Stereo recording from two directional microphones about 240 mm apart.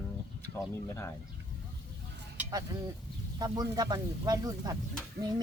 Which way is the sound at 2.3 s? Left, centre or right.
Centre.